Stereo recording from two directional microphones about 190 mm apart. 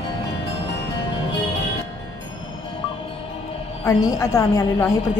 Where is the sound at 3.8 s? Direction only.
20° left (ahead or behind).